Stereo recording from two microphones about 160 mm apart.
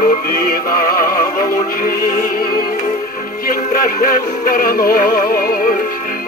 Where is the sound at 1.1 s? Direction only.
65° left (ahead or behind).